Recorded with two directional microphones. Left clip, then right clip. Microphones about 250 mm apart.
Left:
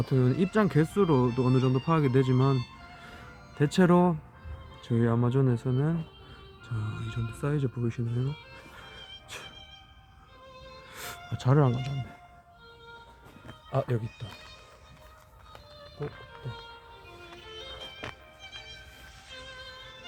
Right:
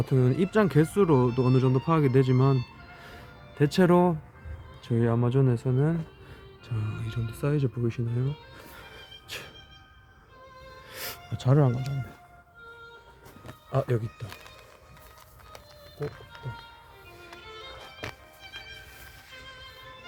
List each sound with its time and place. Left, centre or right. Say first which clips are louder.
0.0 s speech: right 2 dB; centre
3.6 s speech: right 2 dB; centre
9.3 s music: right 4 dB; centre
10.9 s insect: right 2 dB; centre
13.5 s speech: right 2 dB; centre
15.5 s run: right 1 dB; centre
17.4 s music: even; left
18.0 s music: right 4 dB; centre
19.3 s music: left 3 dB; left